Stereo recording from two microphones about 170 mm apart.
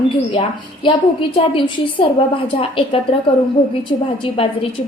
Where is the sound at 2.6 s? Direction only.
30° left (ahead or behind).